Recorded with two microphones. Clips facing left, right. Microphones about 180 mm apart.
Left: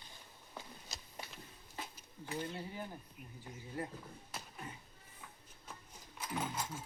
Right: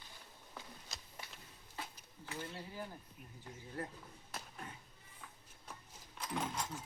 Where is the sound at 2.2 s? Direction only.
20° left (ahead or behind).